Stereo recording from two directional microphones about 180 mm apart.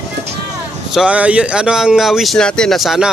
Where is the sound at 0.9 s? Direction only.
5° right (ahead or behind).